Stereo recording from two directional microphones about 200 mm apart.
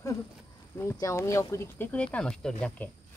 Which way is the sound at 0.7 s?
15° left (ahead or behind).